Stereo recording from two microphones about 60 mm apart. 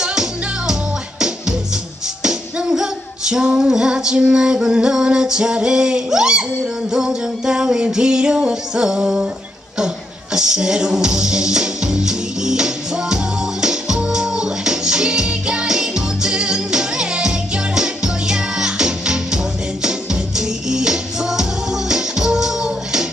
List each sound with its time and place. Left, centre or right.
0.0 s music: centre
2.2 s music: centre
10.3 s music: centre